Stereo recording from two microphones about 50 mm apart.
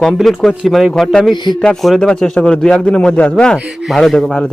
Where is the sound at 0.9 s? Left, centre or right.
Centre.